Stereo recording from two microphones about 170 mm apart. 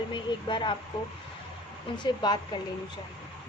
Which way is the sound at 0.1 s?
25° left (ahead or behind).